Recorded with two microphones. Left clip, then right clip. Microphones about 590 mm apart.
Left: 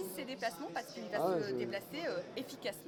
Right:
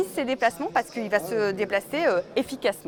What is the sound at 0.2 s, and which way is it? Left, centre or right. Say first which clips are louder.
A woman's voice: right 16 dB; right.